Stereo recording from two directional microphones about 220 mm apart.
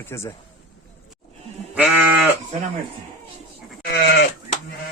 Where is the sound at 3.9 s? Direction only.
50° left (ahead or behind).